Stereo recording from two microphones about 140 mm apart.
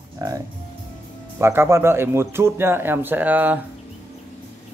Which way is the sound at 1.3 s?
20° right (ahead or behind).